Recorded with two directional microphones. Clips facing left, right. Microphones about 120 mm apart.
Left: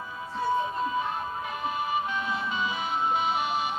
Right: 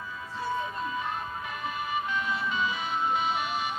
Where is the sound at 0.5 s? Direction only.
25° left (ahead or behind).